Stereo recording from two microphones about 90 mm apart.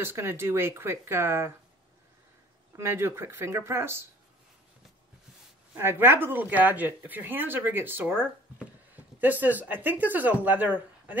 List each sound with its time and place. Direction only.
0.0 s a woman's voice: 30° right (ahead or behind)
2.8 s a woman's voice: 30° right (ahead or behind)
5.8 s a woman's voice: 25° right (ahead or behind)